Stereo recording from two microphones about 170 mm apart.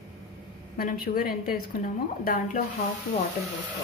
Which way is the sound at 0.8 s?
60° left (ahead or behind).